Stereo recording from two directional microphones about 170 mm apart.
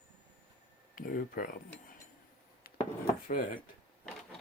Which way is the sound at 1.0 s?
55° left (ahead or behind).